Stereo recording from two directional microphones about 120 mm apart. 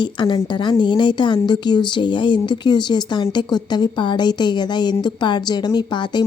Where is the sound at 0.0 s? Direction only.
40° left (ahead or behind).